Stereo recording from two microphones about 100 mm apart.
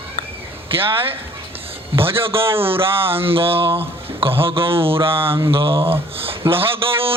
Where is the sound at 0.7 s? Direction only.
65° right (ahead or behind).